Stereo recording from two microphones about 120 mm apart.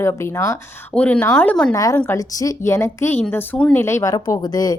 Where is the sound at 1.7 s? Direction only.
30° left (ahead or behind); by 3.7 s 10° left (ahead or behind).